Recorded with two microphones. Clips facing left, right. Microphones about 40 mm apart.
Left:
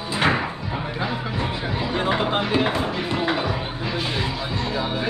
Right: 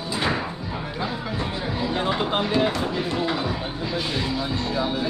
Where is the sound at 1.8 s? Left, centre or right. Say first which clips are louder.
Left 2 dB; left.